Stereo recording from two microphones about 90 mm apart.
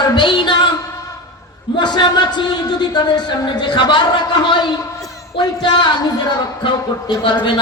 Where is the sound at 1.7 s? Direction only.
55° left (ahead or behind).